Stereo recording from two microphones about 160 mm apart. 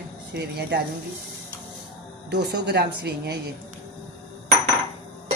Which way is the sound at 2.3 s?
90° right.